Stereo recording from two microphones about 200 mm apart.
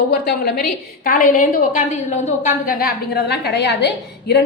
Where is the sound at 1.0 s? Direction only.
40° left (ahead or behind); by 4.4 s 60° left (ahead or behind).